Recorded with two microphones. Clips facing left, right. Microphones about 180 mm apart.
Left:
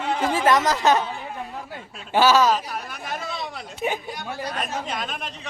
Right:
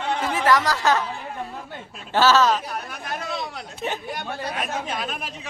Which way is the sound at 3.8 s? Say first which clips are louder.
Left 3 dB; 10° left (ahead or behind).